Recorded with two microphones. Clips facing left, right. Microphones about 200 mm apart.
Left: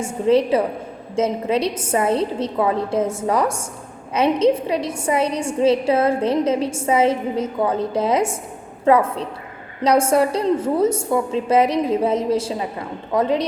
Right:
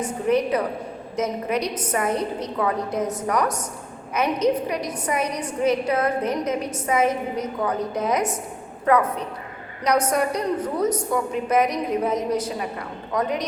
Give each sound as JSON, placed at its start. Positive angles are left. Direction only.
{"t": 0.0, "sound": "a woman's voice", "side_deg": 25}